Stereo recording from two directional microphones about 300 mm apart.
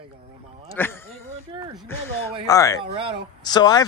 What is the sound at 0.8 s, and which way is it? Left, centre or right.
Speech, centre.